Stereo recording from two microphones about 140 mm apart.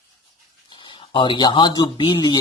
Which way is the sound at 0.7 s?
35° left (ahead or behind).